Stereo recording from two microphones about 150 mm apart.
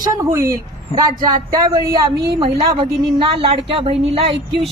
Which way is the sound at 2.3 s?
35° right (ahead or behind).